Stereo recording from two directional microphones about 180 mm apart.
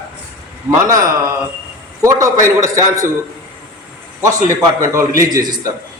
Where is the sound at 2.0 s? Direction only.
15° right (ahead or behind).